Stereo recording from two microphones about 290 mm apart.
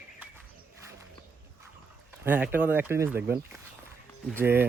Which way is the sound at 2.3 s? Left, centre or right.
Centre.